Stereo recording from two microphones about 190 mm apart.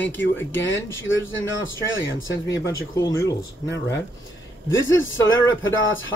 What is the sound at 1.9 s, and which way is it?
Speech, 75° left (ahead or behind).